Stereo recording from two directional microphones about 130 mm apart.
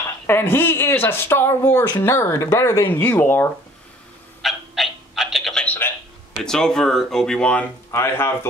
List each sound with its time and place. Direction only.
0.3 s speech: 15° left (ahead or behind)
4.4 s a sound: centre (ahead or behind)
6.3 s speech: 5° left (ahead or behind)
7.9 s speech: 20° left (ahead or behind)